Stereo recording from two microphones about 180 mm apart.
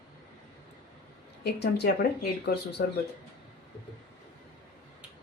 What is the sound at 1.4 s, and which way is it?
Speech, 65° left (ahead or behind).